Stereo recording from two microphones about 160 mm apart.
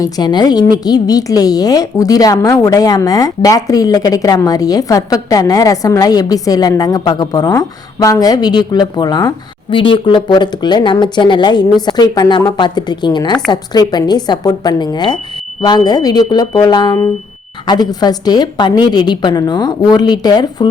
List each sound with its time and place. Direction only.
0.0 s a woman's voice: 25° left (ahead or behind)